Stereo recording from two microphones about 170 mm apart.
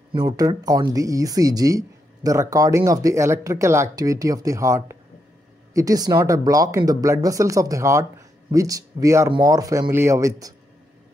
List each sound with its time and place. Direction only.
0.1 s speech: 25° right (ahead or behind)